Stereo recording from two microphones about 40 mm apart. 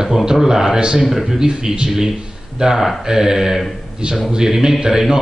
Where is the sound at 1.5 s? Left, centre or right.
Centre.